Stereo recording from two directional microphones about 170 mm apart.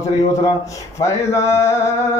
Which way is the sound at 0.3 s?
20° left (ahead or behind).